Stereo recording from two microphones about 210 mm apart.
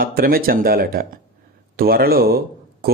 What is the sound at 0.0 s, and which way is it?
Speech, 45° right (ahead or behind).